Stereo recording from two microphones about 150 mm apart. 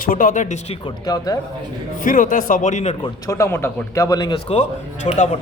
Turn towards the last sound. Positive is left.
turn(degrees=45)  # may be behind; listen again after turning